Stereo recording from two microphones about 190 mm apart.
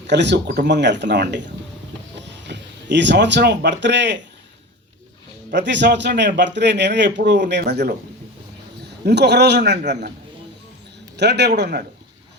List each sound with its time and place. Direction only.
0.1 s a man's voice: 65° right (ahead or behind)
5.5 s a man's voice: 65° right (ahead or behind)
11.2 s a man's voice: 60° right (ahead or behind)